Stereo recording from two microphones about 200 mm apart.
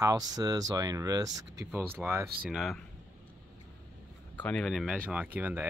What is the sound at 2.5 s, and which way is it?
Speech, centre (ahead or behind).